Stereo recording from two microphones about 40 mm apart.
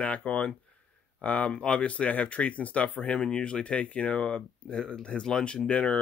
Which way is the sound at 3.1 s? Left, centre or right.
Centre.